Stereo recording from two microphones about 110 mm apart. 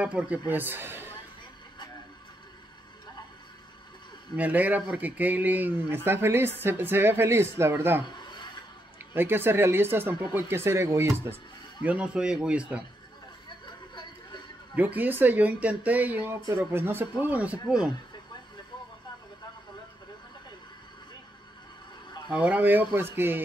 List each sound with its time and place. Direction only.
0.0 s a man's voice: 10° right (ahead or behind)
4.4 s a man's voice: 15° right (ahead or behind)
8.0 s a sound: 45° left (ahead or behind)
8.9 s speech: 20° right (ahead or behind)
11.8 s a man's voice: 10° right (ahead or behind)
13.7 s a sound: 45° left (ahead or behind)
14.8 s a man's voice: 15° right (ahead or behind)
22.3 s a man's voice: 10° right (ahead or behind)